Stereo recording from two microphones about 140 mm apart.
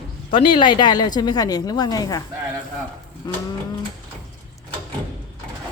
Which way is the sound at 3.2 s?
25° left (ahead or behind).